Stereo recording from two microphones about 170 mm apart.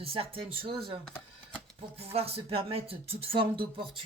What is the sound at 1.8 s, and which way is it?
Speech, 35° right (ahead or behind).